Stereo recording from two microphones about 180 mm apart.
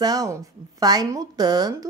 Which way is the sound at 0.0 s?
20° right (ahead or behind).